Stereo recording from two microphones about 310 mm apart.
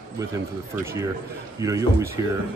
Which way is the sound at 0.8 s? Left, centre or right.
Centre.